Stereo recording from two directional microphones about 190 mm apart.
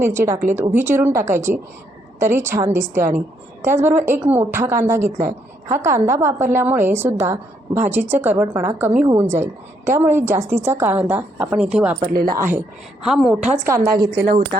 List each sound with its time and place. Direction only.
0.0 s a woman's voice: 15° right (ahead or behind)
12.1 s a woman's voice: 50° right (ahead or behind)
13.0 s a woman's voice: 5° right (ahead or behind)
13.7 s a woman's voice: 50° right (ahead or behind)